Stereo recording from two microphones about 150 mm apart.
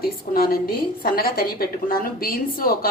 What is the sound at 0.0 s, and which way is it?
Speech, 85° left.